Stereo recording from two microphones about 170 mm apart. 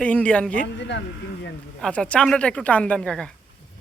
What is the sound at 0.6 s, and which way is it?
Speech, 90° left.